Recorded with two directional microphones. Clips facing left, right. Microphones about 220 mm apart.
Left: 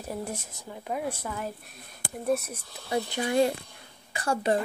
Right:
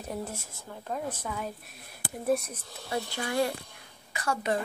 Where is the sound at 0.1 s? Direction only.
15° left (ahead or behind).